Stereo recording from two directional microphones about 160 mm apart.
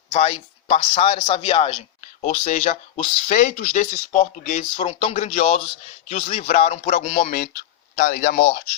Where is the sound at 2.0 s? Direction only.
50° left (ahead or behind).